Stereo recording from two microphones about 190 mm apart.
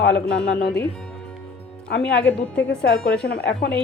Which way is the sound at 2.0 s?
5° left (ahead or behind).